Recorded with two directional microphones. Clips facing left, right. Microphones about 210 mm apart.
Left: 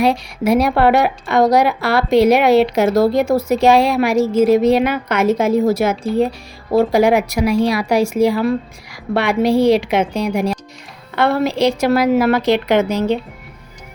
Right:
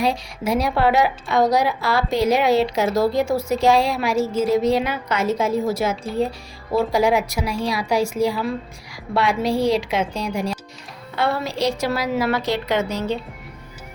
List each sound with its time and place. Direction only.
0.0 s a woman's voice: 65° left (ahead or behind)
11.9 s a woman's voice: 55° left (ahead or behind)
12.5 s a woman's voice: 70° left (ahead or behind)